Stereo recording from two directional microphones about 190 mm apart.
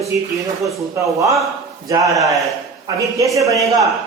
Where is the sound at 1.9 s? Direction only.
20° right (ahead or behind).